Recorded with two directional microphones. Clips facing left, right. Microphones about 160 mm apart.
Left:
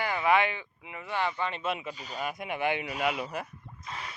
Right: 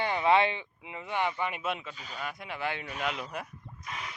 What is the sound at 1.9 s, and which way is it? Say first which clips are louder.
Speech: left 3 dB; 40° left (ahead or behind).